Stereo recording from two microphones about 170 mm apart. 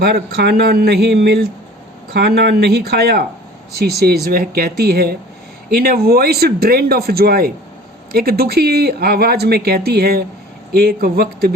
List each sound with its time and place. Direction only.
0.0 s speech: 70° right (ahead or behind)